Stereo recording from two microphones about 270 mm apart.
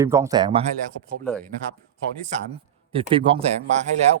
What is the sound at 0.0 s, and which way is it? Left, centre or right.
Speech, centre.